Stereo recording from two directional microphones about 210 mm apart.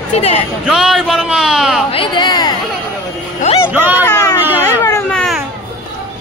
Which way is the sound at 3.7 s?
10° right (ahead or behind).